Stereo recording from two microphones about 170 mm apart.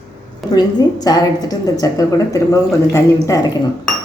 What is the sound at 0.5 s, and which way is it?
A woman's voice, 25° left (ahead or behind).